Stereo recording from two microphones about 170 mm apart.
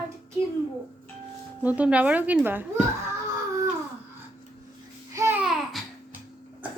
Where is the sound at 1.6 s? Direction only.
10° right (ahead or behind).